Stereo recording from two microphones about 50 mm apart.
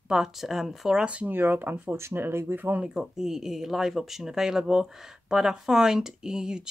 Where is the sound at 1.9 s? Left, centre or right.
Right.